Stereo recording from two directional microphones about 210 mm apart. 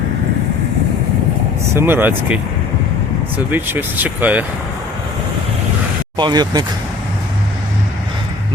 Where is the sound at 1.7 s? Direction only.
10° right (ahead or behind).